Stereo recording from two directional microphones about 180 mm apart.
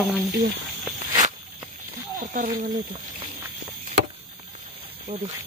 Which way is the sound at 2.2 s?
45° right (ahead or behind).